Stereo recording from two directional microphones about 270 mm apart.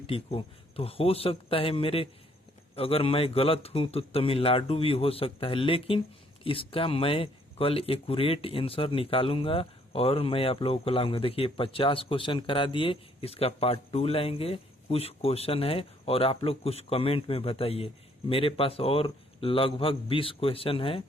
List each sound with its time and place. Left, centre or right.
0.1 s speech: left